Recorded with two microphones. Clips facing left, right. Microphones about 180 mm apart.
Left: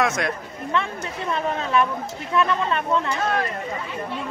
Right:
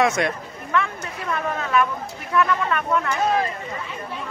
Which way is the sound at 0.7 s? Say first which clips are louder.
Right 2 dB; 25° left (ahead or behind).